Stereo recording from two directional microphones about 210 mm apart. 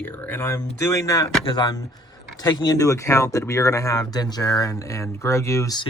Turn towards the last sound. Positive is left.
turn(degrees=15)  # may be behind; listen again after turning